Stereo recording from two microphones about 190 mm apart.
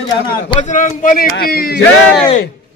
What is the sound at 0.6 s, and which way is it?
A man's voice, 40° left (ahead or behind).